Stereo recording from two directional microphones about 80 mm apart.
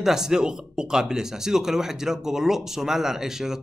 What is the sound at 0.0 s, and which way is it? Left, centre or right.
Speech, centre.